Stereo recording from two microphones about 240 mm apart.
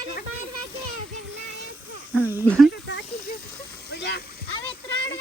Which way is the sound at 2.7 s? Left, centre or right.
Left.